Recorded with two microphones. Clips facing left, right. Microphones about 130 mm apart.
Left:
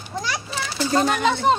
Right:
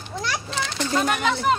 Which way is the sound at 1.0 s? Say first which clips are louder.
Left 3 dB; 30° left (ahead or behind).